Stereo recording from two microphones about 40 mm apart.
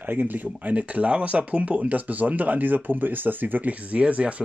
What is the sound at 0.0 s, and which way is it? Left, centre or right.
Speech, right.